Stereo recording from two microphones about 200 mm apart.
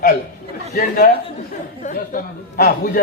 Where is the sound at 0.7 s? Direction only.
45° left (ahead or behind).